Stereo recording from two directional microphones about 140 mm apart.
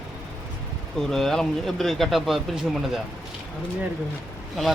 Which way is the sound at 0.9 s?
5° left (ahead or behind).